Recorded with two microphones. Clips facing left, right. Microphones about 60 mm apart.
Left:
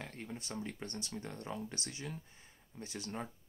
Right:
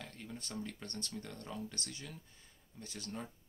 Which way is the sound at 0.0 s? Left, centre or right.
Left.